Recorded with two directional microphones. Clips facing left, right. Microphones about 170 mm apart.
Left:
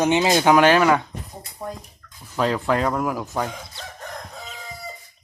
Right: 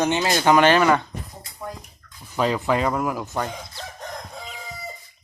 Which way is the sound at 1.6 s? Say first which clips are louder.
Left 2 dB; 30° left (ahead or behind).